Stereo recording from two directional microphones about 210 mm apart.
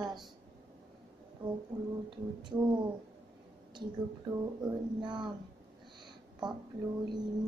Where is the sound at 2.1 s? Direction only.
20° right (ahead or behind).